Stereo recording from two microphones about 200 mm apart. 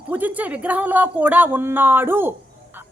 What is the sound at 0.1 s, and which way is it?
A woman's voice, 10° right (ahead or behind).